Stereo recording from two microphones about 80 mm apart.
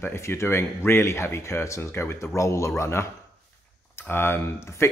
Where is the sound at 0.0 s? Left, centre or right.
Left.